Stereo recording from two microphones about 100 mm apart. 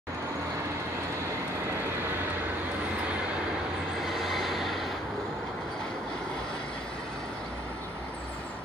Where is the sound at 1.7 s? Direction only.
25° right (ahead or behind).